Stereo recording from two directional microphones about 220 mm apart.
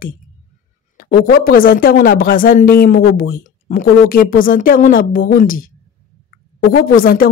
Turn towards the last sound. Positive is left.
turn(degrees=40)  # may be behind; listen again after turning